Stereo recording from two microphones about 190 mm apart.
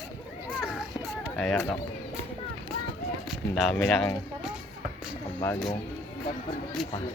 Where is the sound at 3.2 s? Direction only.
Centre (ahead or behind).